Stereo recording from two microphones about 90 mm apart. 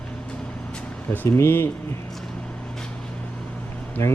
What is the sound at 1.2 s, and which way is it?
Speech, 25° left (ahead or behind).